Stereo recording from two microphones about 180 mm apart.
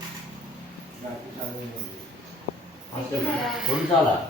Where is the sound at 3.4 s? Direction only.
Centre (ahead or behind).